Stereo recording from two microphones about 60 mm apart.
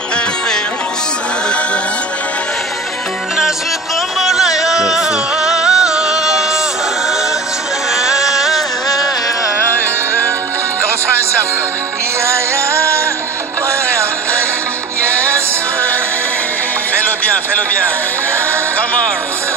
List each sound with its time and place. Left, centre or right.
4.2 s music: centre
7.9 s music: centre
12.3 s music: right